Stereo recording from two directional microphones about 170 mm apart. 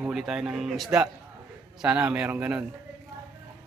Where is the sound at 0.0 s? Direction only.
Centre (ahead or behind).